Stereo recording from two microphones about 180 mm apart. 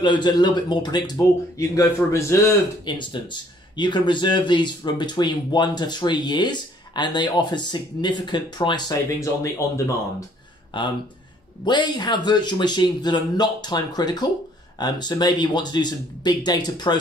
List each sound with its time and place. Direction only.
0.0 s speech: 25° left (ahead or behind)
10.7 s speech: 25° left (ahead or behind)